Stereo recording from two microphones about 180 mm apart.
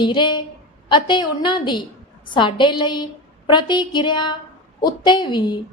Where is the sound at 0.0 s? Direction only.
25° left (ahead or behind).